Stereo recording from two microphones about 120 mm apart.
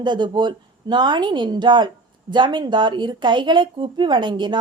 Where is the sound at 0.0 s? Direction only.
40° right (ahead or behind).